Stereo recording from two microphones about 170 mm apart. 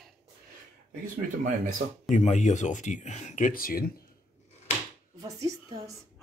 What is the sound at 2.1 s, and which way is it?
Speech, 45° left (ahead or behind).